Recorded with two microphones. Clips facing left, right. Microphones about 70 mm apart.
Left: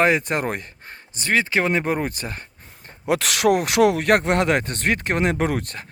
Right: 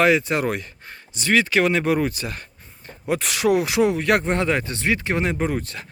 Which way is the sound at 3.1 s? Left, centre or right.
Left.